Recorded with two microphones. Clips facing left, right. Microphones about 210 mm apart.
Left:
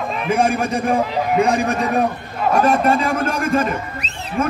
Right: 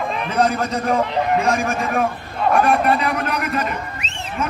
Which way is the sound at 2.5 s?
45° left (ahead or behind).